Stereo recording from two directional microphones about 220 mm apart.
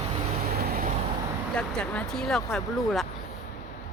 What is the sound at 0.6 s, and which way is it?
Vehicle, 40° right (ahead or behind).